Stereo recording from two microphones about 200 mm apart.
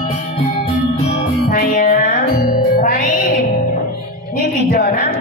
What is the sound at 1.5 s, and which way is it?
Music, 40° left (ahead or behind).